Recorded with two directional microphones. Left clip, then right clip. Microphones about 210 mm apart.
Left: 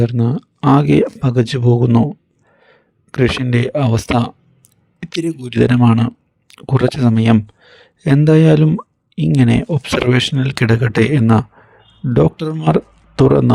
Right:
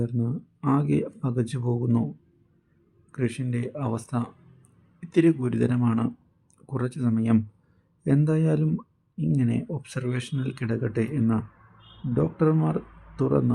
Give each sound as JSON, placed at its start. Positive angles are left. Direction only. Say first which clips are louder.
{"t": 0.0, "sound": "speech", "louder": "left 13 dB", "side_deg": 45}
{"t": 3.1, "sound": "speech", "louder": "left 15 dB", "side_deg": 45}
{"t": 4.9, "sound": "a sound", "louder": "left 1 dB", "side_deg": 45}
{"t": 5.2, "sound": "speech", "louder": "right 1 dB", "side_deg": 0}
{"t": 5.5, "sound": "speech", "louder": "left 12 dB", "side_deg": 45}
{"t": 12.6, "sound": "speech", "louder": "left 14 dB", "side_deg": 50}